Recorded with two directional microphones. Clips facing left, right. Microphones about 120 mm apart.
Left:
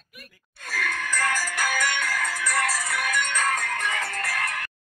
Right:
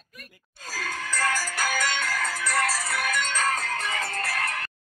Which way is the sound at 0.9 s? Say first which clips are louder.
Even; 30° right (ahead or behind).